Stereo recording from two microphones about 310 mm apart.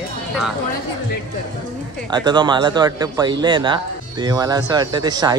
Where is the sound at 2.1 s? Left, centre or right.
Centre.